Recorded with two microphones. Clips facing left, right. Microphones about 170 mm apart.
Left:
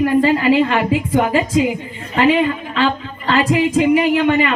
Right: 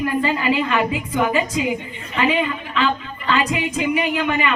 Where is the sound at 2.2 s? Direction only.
45° left (ahead or behind).